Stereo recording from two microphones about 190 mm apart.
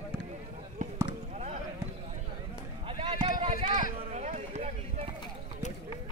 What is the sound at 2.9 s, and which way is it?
Run, 25° right (ahead or behind).